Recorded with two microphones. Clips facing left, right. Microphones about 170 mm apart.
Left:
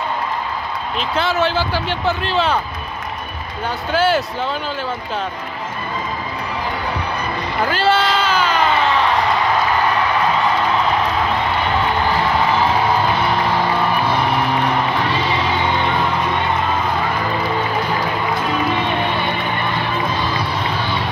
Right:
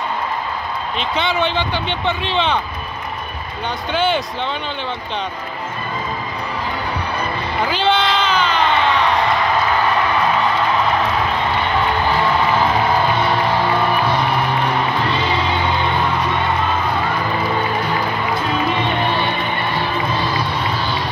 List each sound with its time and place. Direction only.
0.9 s speech: centre (ahead or behind)
3.9 s speech: 5° left (ahead or behind)
7.6 s a sound: 5° left (ahead or behind)